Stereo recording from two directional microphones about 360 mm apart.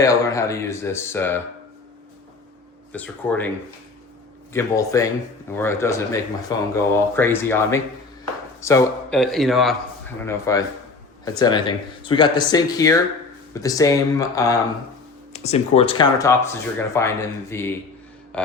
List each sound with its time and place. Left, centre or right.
0.0 s speech: centre
2.9 s speech: centre
4.5 s speech: centre